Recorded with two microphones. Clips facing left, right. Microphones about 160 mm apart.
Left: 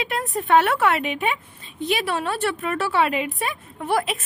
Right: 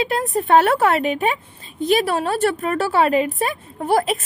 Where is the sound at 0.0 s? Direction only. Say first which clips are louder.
Right 5 dB; 35° right (ahead or behind).